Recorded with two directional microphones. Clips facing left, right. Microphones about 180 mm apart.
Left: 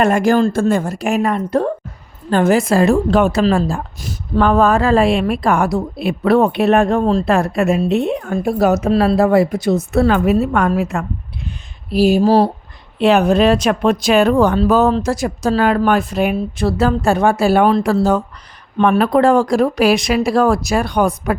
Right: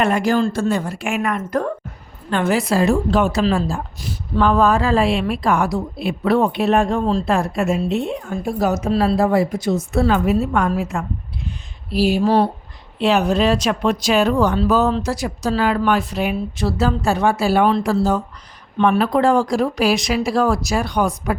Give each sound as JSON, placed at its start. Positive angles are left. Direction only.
{"t": 0.0, "sound": "speech", "side_deg": 45}
{"t": 2.3, "sound": "a woman's voice", "side_deg": 45}
{"t": 11.9, "sound": "speech", "side_deg": 45}
{"t": 13.0, "sound": "a woman's voice", "side_deg": 55}